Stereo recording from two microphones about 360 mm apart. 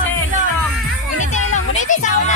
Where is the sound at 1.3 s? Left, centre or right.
Centre.